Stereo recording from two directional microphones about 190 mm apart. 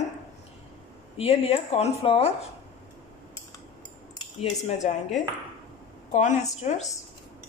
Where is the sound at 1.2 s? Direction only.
30° left (ahead or behind).